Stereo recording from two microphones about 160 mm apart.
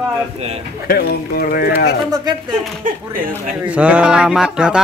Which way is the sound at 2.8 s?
60° right (ahead or behind).